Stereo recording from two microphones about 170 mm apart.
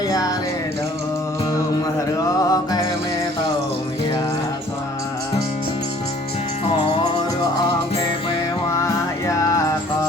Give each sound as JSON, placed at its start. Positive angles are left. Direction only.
{"t": 0.1, "sound": "music", "side_deg": 20}
{"t": 2.4, "sound": "music", "side_deg": 20}
{"t": 8.8, "sound": "music", "side_deg": 20}